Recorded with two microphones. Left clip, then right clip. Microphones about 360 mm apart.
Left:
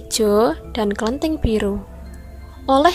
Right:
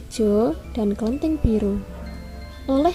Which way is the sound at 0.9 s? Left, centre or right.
Left.